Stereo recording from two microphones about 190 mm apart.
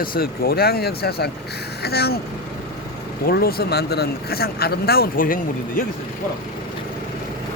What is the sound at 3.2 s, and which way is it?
Speech, 55° left (ahead or behind).